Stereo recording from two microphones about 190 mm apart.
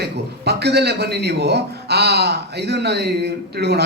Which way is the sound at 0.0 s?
60° right (ahead or behind).